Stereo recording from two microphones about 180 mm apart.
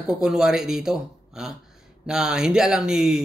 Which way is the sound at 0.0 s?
5° right (ahead or behind).